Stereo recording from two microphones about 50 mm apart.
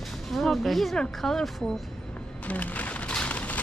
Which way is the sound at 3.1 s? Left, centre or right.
Left.